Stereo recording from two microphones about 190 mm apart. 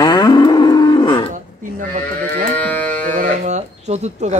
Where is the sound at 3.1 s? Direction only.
40° right (ahead or behind).